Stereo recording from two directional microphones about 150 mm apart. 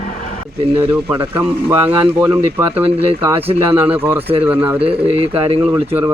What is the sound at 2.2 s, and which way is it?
Speech, 10° right (ahead or behind).